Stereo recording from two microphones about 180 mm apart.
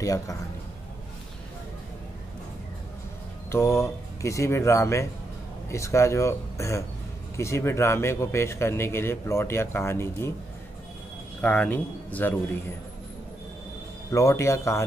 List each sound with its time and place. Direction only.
0.0 s a man's voice: 20° left (ahead or behind)
3.5 s a man's voice: 15° left (ahead or behind)
11.4 s a man's voice: 10° left (ahead or behind)
14.1 s a man's voice: 15° left (ahead or behind)